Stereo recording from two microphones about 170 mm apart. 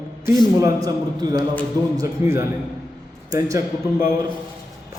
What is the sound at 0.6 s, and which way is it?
A man's voice, 20° right (ahead or behind).